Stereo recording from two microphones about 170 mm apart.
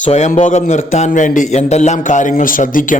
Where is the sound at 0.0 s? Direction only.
45° left (ahead or behind).